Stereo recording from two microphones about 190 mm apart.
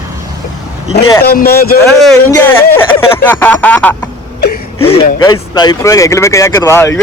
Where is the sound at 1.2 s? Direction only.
55° left (ahead or behind).